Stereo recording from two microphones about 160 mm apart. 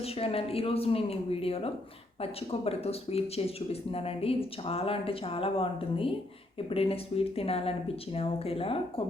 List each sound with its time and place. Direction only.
0.0 s speech: 40° left (ahead or behind)